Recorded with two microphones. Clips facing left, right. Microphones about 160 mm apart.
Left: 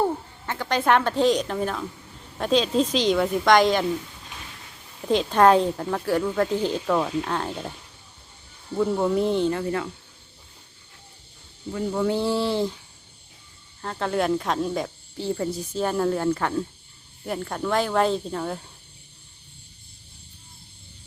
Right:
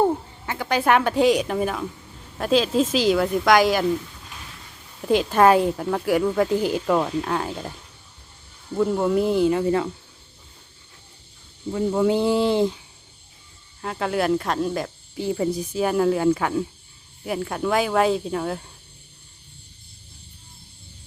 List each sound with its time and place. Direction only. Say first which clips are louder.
0.4 s speech: right 1 dB; 5° right (ahead or behind)
5.0 s speech: right 1 dB; 5° right (ahead or behind)
11.7 s speech: right 4 dB; 20° right (ahead or behind)
13.8 s speech: right 1 dB; 5° right (ahead or behind)
15.2 s speech: right 3 dB; 10° right (ahead or behind)